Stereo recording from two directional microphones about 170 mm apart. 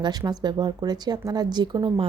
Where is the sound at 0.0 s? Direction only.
25° right (ahead or behind).